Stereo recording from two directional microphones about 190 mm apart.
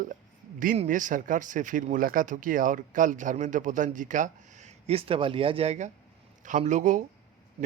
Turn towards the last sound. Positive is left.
turn(degrees=-40)  # may be behind; listen again after turning